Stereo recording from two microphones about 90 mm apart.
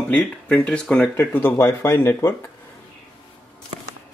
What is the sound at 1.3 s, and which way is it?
A man's voice, 25° left (ahead or behind).